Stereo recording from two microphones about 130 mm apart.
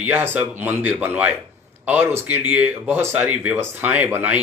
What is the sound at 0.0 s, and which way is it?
Speech, 15° right (ahead or behind).